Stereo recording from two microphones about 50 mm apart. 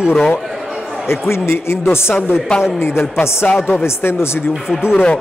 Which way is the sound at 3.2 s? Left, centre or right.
Left.